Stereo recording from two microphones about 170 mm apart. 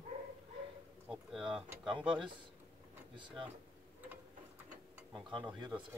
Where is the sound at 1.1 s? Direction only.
Centre (ahead or behind).